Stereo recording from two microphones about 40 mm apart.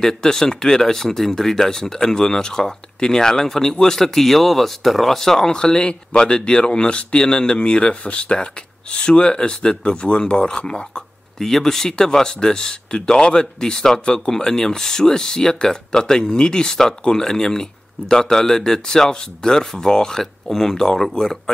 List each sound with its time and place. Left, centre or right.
0.0 s speech: centre
11.3 s speech: centre